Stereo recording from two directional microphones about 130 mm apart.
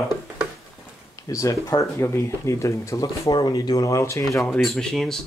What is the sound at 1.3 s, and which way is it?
Speech, 25° left (ahead or behind).